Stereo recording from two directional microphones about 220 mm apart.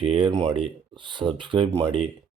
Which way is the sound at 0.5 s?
25° right (ahead or behind).